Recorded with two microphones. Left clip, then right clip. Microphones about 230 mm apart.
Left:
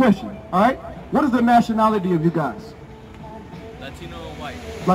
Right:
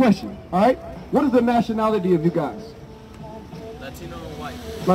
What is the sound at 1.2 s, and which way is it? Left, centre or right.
A man's voice, left.